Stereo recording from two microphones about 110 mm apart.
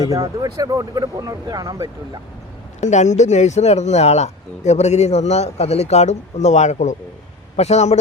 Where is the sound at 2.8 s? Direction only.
90° left.